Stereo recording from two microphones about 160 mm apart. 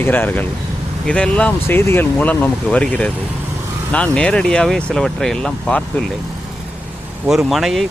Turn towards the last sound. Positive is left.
turn(degrees=0)  # may be behind; listen again after turning